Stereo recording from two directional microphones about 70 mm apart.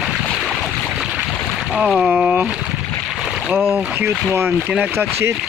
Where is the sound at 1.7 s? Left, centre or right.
Centre.